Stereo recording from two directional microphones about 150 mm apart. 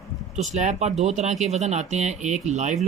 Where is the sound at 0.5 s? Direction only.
50° right (ahead or behind).